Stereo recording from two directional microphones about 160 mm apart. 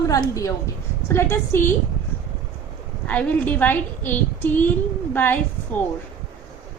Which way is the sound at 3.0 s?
10° left (ahead or behind).